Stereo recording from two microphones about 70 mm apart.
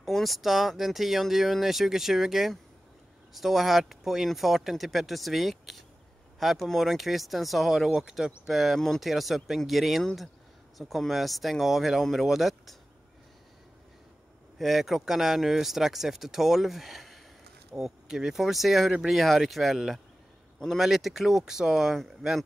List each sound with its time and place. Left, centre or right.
0.0 s speech: centre
14.6 s speech: centre